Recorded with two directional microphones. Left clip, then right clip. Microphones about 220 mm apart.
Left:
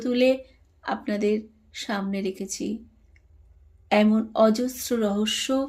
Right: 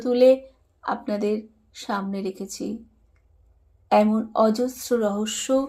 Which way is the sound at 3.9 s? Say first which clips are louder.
Right 2 dB; 5° left (ahead or behind).